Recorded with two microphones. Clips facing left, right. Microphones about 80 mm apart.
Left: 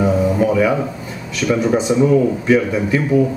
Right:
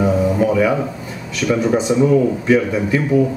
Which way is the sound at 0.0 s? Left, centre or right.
Left.